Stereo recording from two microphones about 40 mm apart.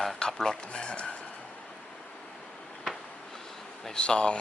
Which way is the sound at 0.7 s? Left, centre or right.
Left.